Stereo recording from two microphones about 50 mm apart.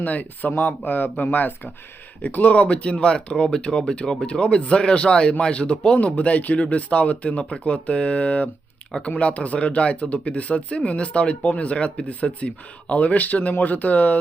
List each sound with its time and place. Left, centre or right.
0.0 s speech: left